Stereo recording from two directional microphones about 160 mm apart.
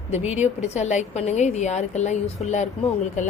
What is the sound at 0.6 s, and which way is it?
Speech, 45° left (ahead or behind).